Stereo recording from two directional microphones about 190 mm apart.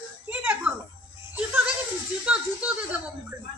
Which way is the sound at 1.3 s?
10° right (ahead or behind).